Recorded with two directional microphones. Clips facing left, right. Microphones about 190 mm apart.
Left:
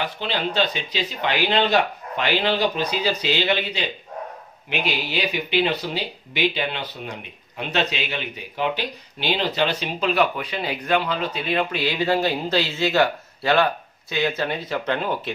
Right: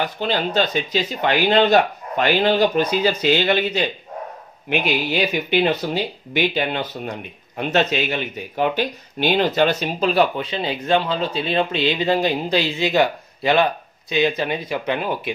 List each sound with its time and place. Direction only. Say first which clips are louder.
0.0 s speech: right 4 dB; 45° right (ahead or behind); by 15.3 s 10° right (ahead or behind)